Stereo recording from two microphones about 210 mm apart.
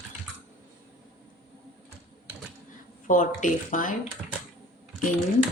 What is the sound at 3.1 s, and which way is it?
Speech, 40° left (ahead or behind).